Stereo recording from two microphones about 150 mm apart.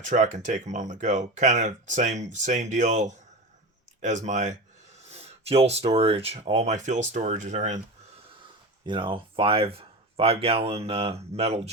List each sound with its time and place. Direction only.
0.0 s speech: 55° right (ahead or behind)
8.8 s speech: 30° right (ahead or behind)